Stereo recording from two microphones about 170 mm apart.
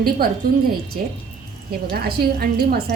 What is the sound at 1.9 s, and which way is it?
Speech, 65° right (ahead or behind).